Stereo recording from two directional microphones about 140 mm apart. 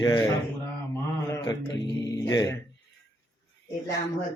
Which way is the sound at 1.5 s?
25° left (ahead or behind).